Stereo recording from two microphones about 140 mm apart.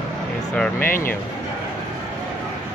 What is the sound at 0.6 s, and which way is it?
Speech, 15° left (ahead or behind).